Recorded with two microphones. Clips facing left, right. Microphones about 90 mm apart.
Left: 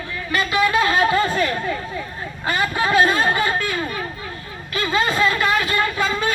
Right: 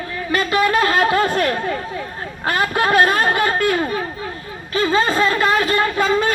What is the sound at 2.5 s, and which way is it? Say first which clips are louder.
Speech: right 3 dB; 55° right (ahead or behind).